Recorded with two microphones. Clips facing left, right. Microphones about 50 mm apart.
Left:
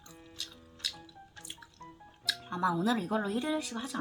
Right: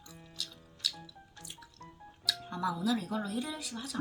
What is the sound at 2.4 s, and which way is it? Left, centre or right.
Speech, left.